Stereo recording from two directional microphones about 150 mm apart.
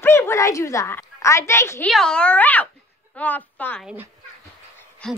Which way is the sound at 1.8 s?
5° left (ahead or behind).